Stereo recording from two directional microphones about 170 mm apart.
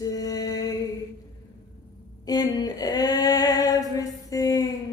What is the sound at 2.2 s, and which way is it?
Female singing, 20° left (ahead or behind).